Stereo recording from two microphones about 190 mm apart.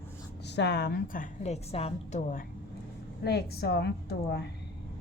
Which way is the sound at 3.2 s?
60° left (ahead or behind).